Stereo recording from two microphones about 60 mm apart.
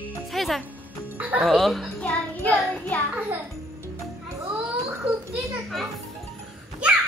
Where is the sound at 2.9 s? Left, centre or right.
Left.